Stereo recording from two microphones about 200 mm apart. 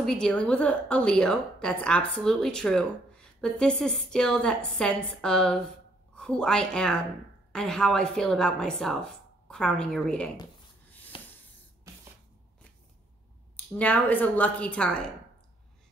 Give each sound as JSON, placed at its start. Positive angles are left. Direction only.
{"t": 0.0, "sound": "a woman's voice", "side_deg": 5}
{"t": 11.1, "sound": "a sound", "side_deg": 25}
{"t": 13.7, "sound": "a woman's voice", "side_deg": 5}